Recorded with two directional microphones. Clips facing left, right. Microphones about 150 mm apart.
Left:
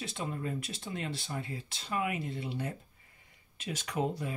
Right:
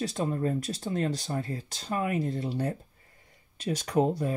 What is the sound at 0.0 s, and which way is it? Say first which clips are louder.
Speech: right 8 dB; 40° right (ahead or behind).